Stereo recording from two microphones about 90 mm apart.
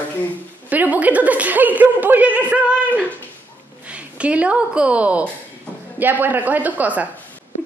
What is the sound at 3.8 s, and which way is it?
A woman's voice, 15° right (ahead or behind).